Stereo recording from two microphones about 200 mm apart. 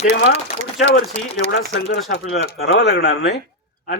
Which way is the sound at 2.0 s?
55° left (ahead or behind).